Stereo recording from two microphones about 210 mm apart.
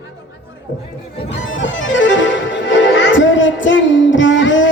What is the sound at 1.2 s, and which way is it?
Music, 60° left (ahead or behind).